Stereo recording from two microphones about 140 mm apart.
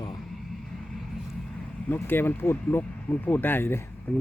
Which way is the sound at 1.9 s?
15° left (ahead or behind).